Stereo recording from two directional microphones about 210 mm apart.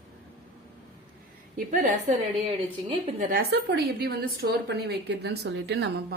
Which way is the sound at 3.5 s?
50° right (ahead or behind).